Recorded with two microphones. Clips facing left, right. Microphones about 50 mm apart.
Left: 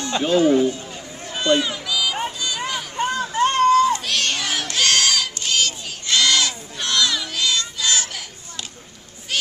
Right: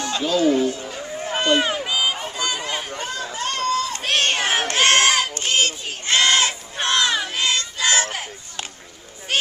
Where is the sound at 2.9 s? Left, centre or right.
Left.